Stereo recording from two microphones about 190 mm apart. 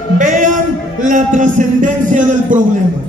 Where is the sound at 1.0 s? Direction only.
40° right (ahead or behind).